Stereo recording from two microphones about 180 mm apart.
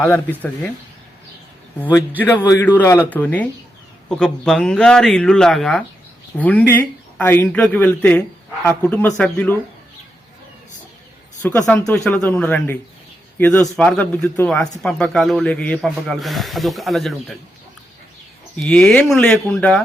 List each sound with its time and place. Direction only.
0.0 s speech: 10° left (ahead or behind)
1.8 s speech: 10° left (ahead or behind)
11.4 s speech: 15° left (ahead or behind)
11.9 s speech: 5° left (ahead or behind)
18.5 s speech: 5° left (ahead or behind)